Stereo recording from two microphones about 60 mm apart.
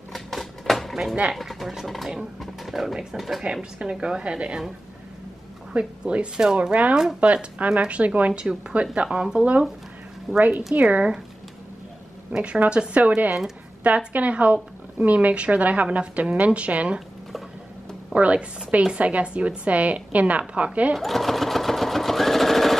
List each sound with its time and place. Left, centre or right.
0.1 s typewriter: centre
1.3 s speech: centre
3.8 s speech: centre
5.7 s speech: centre
12.3 s speech: right
18.1 s speech: right
20.9 s sewing machine: centre